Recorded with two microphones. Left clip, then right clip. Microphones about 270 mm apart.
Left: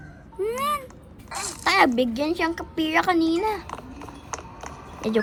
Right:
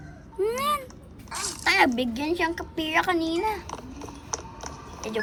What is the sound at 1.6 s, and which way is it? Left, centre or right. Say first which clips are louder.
A woman's voice: left 2 dB; centre.